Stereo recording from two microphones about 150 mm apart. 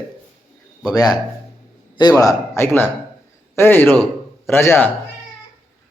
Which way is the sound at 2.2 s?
20° left (ahead or behind).